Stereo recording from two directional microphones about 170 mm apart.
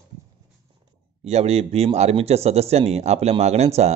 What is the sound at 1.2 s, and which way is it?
Speech, 40° right (ahead or behind).